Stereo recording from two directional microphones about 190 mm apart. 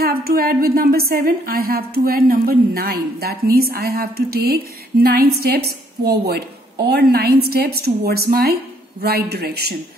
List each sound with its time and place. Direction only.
0.0 s a woman's voice: 55° right (ahead or behind)